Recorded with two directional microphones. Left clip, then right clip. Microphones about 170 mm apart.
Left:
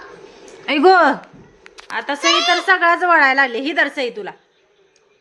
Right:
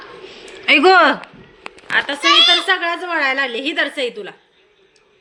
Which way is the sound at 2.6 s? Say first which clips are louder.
Left 5 dB; 20° left (ahead or behind).